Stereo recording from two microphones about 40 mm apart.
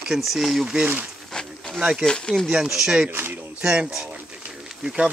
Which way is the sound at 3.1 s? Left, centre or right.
Right.